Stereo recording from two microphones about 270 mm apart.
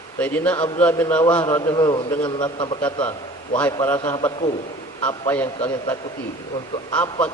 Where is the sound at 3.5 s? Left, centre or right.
Centre.